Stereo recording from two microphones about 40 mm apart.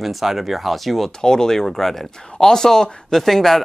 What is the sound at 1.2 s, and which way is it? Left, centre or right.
Speech, centre.